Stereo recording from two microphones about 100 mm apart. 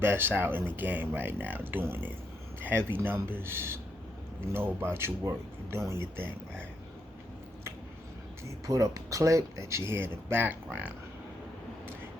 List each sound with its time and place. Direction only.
0.0 s speech: 20° right (ahead or behind)
8.4 s speech: 35° right (ahead or behind)